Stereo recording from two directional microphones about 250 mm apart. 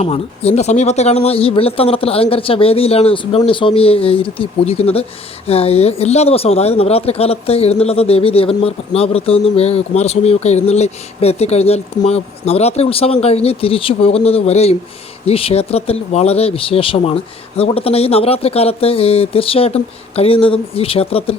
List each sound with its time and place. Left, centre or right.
0.0 s speech: left